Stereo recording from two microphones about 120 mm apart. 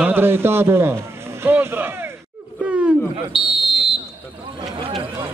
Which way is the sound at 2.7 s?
10° right (ahead or behind).